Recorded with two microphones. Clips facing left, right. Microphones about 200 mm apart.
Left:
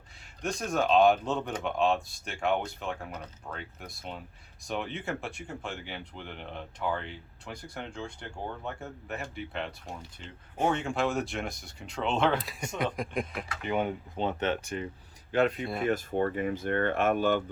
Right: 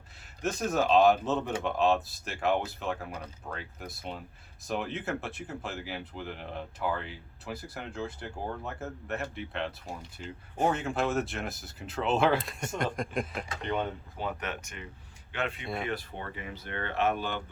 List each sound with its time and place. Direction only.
0.4 s speech: 5° right (ahead or behind)
14.2 s speech: 25° left (ahead or behind)
15.6 s speech: centre (ahead or behind)
15.9 s speech: 45° left (ahead or behind)